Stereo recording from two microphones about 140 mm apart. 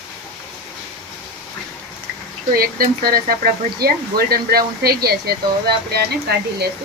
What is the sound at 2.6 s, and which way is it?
Speech, 90° right.